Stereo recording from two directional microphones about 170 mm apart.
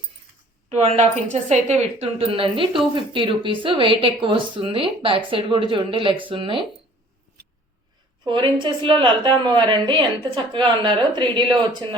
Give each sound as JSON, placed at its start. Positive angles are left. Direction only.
{"t": 0.7, "sound": "a woman's voice", "side_deg": -40}
{"t": 8.2, "sound": "speech", "side_deg": -25}